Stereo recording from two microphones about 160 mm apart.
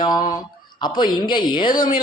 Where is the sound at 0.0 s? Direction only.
25° left (ahead or behind).